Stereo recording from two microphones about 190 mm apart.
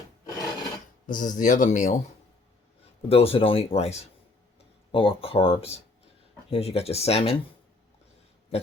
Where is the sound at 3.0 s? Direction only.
30° left (ahead or behind).